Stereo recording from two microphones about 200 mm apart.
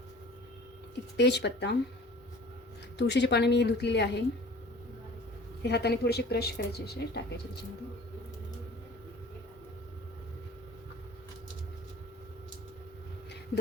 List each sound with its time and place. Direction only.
1.1 s speech: 60° left (ahead or behind)
3.0 s speech: 60° left (ahead or behind)
5.6 s speech: 55° left (ahead or behind)